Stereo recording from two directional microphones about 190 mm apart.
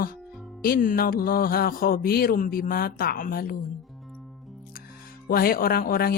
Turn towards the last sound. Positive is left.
turn(degrees=50)  # may be behind; listen again after turning